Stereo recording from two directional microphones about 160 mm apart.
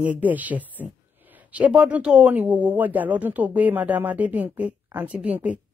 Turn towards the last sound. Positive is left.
turn(degrees=-10)  # may be behind; listen again after turning